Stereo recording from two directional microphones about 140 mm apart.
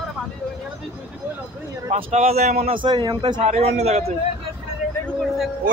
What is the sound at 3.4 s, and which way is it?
Speech, 50° right (ahead or behind).